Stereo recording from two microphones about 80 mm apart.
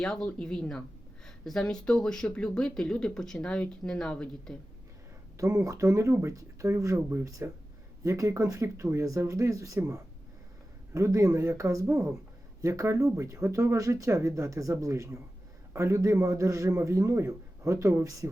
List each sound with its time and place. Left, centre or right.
0.0 s a woman's voice: centre
5.4 s a man's voice: right
10.9 s a man's voice: right